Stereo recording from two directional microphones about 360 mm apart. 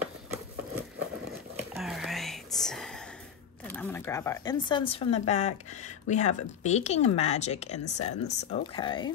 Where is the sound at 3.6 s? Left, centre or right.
Centre.